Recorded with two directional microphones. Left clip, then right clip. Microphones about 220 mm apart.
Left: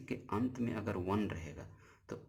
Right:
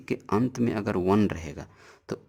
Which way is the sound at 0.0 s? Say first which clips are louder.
Right 11 dB; 45° right (ahead or behind).